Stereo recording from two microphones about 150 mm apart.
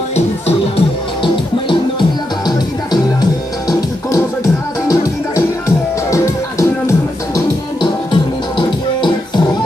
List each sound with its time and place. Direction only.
0.1 s music: 40° left (ahead or behind); by 4.2 s 25° left (ahead or behind)
6.1 s music: 20° left (ahead or behind)
7.8 s music: 30° left (ahead or behind)